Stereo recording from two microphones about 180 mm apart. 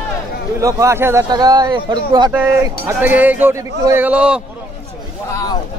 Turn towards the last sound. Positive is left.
turn(degrees=-5)  # may be behind; listen again after turning